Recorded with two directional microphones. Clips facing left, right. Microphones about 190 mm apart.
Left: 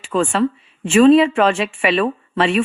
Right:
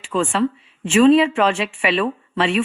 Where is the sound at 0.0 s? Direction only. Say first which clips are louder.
Left 2 dB; 50° left (ahead or behind).